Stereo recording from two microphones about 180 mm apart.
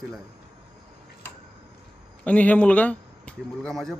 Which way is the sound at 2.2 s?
10° left (ahead or behind).